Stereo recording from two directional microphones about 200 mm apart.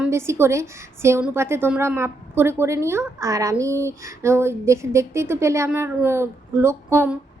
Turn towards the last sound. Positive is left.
turn(degrees=-10)  # may be behind; listen again after turning